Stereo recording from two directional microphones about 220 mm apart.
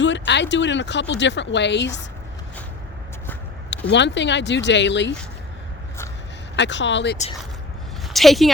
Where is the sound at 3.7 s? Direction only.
55° left (ahead or behind).